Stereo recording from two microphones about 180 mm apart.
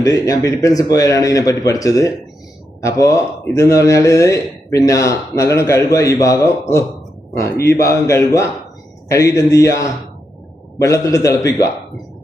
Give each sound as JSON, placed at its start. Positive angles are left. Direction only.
{"t": 0.0, "sound": "speech", "side_deg": 20}